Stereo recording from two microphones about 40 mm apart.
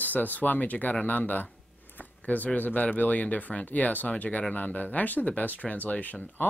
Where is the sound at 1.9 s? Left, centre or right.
Left.